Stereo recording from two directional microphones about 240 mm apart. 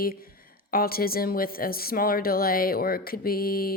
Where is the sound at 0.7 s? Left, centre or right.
Left.